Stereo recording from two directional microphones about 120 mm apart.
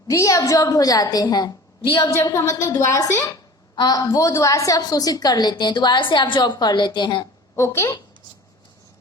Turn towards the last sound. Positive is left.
turn(degrees=25)  # may be behind; listen again after turning